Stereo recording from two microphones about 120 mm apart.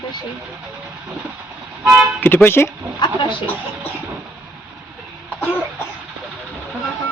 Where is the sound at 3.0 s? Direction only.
40° left (ahead or behind).